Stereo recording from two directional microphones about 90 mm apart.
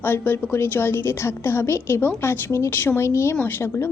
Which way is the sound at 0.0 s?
25° left (ahead or behind).